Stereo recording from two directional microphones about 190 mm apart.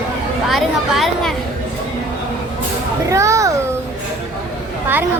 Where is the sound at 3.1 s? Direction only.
15° right (ahead or behind).